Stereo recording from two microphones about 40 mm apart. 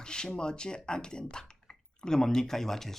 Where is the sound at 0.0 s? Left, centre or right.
Centre.